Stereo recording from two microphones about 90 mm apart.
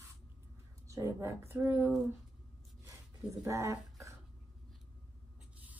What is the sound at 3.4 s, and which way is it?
Speech, 35° right (ahead or behind).